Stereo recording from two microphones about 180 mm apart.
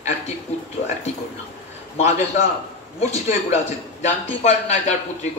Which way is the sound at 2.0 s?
40° left (ahead or behind).